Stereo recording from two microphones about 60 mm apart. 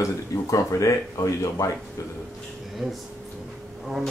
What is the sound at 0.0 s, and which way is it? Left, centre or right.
Speech, left.